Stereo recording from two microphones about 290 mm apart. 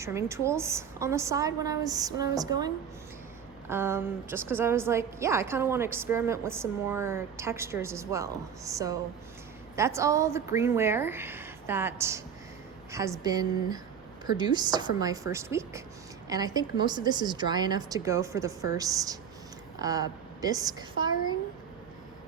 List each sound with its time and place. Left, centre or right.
0.0 s a woman's voice: centre
3.7 s a woman's voice: centre